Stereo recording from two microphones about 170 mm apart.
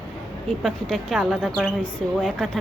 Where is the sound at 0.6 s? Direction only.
Centre (ahead or behind).